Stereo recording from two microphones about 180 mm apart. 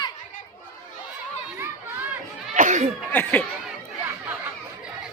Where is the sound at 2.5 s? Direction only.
45° right (ahead or behind).